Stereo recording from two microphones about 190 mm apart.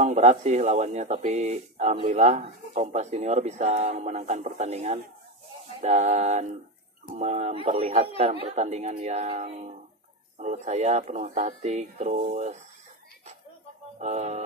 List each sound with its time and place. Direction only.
0.0 s speech: 35° right (ahead or behind)
13.9 s music: 35° right (ahead or behind)